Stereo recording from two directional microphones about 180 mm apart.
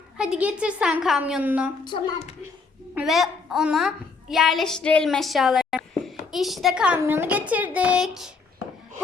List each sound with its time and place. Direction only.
0.2 s a woman's voice: 5° right (ahead or behind)
1.8 s speech: 25° left (ahead or behind)
2.9 s a woman's voice: centre (ahead or behind)